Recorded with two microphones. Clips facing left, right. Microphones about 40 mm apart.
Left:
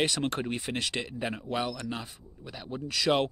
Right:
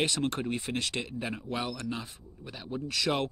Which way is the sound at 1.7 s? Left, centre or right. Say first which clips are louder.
Even; left.